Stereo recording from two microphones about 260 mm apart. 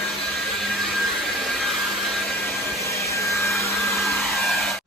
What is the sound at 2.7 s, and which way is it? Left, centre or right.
Aircraft, centre.